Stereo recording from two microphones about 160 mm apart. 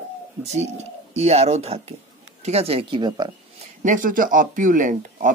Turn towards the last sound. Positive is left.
turn(degrees=-55)  # may be behind; listen again after turning